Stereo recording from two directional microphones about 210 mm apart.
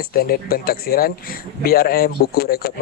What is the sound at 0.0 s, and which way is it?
Speech, 45° left (ahead or behind).